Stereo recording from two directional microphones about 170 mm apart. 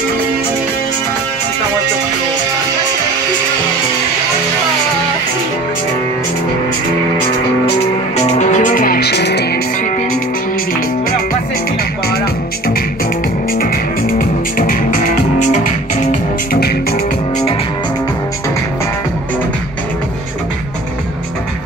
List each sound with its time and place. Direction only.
8.3 s music: 45° left (ahead or behind); by 9.6 s 75° left (ahead or behind)
13.5 s music: 60° left (ahead or behind)